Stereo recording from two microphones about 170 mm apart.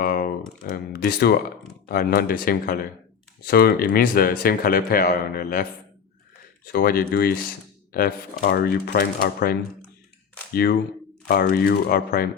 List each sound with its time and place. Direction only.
0.0 s speech: 60° left (ahead or behind)
6.7 s speech: 60° left (ahead or behind)